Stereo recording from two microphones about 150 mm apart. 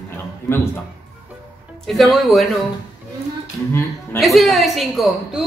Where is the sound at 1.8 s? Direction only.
Centre (ahead or behind).